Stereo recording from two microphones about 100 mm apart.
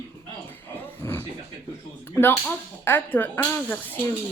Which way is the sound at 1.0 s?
30° left (ahead or behind).